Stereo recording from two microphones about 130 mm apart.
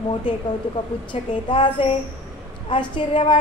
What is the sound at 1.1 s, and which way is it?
Child singing, 40° left (ahead or behind).